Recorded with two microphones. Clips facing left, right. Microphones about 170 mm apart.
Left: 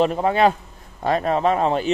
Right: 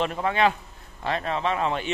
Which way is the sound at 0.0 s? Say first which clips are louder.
Left 6 dB; 35° left (ahead or behind).